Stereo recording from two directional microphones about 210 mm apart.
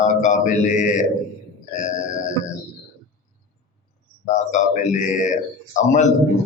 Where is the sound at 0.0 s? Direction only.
35° left (ahead or behind).